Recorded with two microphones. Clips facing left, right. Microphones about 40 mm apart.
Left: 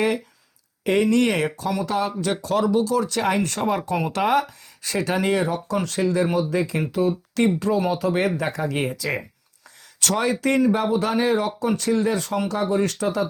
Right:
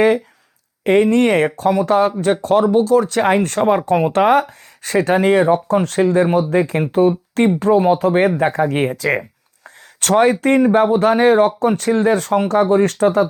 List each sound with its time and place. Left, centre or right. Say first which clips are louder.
0.9 s speech: right 6 dB; right